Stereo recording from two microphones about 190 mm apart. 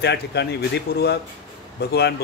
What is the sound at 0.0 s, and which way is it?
Speech, 65° left (ahead or behind).